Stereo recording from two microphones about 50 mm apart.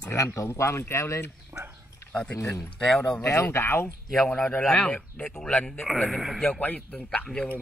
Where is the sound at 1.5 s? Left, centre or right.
Right.